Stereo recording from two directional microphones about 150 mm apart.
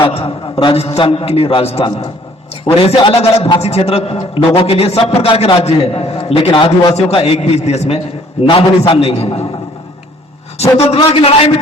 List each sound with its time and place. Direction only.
0.0 s a man's voice: 35° left (ahead or behind)
10.8 s a man's voice: 40° left (ahead or behind)